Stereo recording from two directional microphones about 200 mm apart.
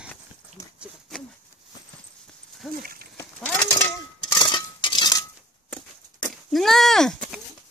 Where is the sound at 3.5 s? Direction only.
10° left (ahead or behind).